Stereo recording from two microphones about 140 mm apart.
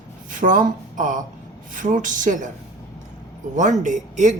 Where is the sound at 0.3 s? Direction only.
70° right (ahead or behind).